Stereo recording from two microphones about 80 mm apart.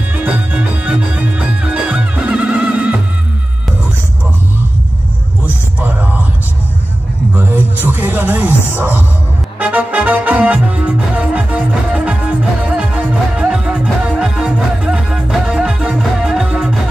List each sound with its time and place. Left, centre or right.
0.1 s music: right
5.8 s a sound: centre
7.3 s music: right